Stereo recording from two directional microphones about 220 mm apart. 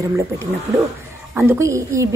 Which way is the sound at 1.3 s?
10° right (ahead or behind).